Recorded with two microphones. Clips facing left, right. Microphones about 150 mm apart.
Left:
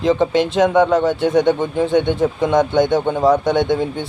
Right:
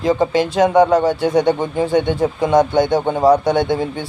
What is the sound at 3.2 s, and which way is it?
Speech, 35° right (ahead or behind).